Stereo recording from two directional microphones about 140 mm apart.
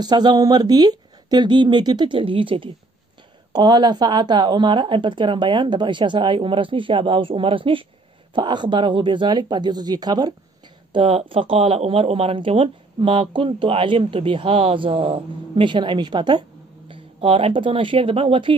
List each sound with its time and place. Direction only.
0.0 s speech: 30° right (ahead or behind)
10.9 s speech: 40° right (ahead or behind)